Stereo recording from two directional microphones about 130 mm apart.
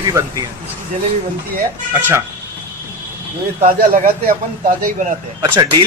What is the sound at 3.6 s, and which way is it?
Speech, 90° right.